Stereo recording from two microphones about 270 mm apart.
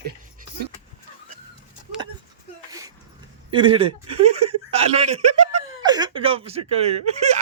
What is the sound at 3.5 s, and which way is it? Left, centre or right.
Speech, centre.